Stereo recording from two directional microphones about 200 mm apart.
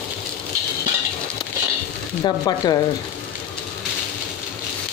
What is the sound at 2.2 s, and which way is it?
Speech, 20° left (ahead or behind).